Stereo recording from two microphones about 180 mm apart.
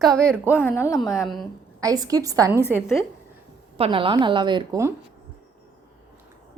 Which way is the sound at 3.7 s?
30° right (ahead or behind).